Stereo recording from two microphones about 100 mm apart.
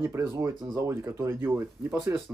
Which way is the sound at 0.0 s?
20° right (ahead or behind).